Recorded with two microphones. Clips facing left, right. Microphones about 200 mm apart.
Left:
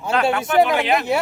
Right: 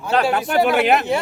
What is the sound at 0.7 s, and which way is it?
Speech, 50° right (ahead or behind).